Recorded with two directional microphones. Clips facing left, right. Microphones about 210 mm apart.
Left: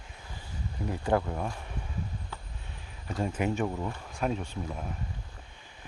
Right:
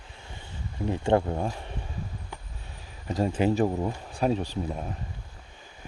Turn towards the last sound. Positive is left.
turn(degrees=-30)  # may be behind; listen again after turning